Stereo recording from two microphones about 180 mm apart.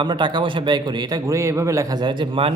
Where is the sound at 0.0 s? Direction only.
25° right (ahead or behind).